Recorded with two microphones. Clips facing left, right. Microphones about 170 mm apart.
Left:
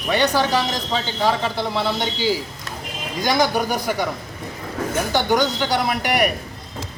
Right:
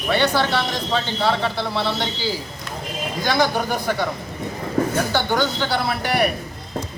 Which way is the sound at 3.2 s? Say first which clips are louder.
Left 1 dB; 15° left (ahead or behind).